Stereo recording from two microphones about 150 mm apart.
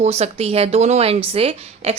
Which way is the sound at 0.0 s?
45° right (ahead or behind).